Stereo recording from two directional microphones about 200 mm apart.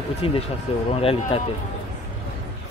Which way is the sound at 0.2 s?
30° left (ahead or behind).